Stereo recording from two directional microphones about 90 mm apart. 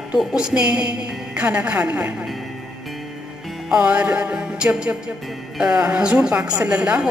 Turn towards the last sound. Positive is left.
turn(degrees=-15)  # may be behind; listen again after turning